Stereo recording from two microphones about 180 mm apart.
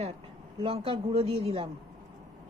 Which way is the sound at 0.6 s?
30° right (ahead or behind).